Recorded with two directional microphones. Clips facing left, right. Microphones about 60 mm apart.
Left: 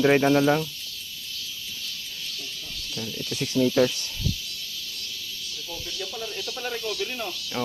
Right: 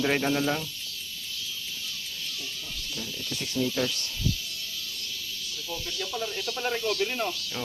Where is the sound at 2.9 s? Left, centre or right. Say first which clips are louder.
Left 4 dB; centre.